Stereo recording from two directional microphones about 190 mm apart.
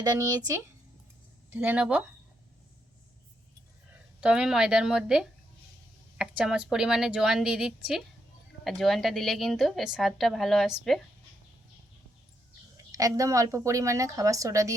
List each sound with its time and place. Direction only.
0.0 s a woman's voice: 20° right (ahead or behind)
4.2 s a woman's voice: 5° right (ahead or behind)
12.7 s a woman's voice: 20° right (ahead or behind)